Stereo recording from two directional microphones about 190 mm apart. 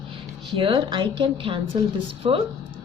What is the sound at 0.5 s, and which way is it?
A woman's voice, 25° right (ahead or behind).